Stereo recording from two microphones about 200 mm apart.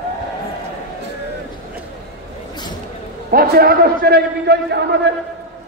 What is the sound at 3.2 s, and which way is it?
A man's voice, 50° right (ahead or behind).